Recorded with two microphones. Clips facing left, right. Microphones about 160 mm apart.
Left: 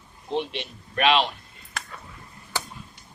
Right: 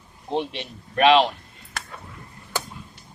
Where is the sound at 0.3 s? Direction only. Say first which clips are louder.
Right 2 dB; 35° right (ahead or behind).